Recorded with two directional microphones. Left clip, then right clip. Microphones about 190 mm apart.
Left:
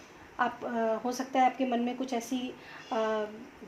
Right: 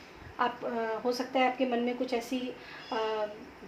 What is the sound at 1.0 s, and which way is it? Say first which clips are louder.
A woman's voice: right 1 dB; 35° left (ahead or behind).